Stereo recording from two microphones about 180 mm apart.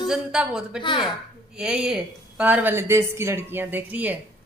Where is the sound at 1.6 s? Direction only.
5° right (ahead or behind).